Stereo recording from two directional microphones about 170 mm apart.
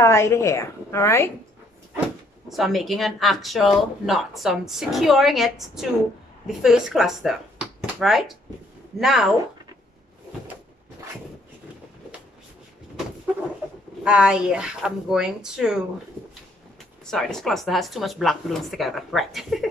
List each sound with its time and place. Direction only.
0.0 s a woman's voice: 15° left (ahead or behind)
2.5 s speech: centre (ahead or behind)
14.0 s speech: 5° right (ahead or behind)
17.0 s speech: 5° left (ahead or behind)